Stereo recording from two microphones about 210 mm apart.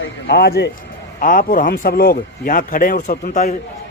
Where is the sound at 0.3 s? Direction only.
50° left (ahead or behind).